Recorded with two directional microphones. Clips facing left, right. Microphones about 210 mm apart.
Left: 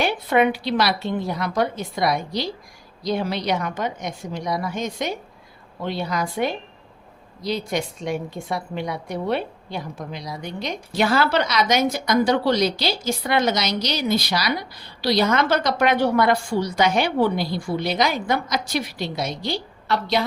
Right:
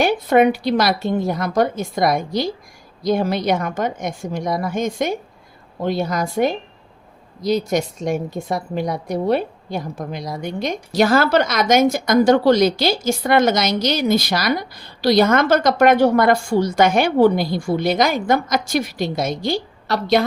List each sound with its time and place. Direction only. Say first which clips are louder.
0.0 s a woman's voice: right 5 dB; 45° right (ahead or behind)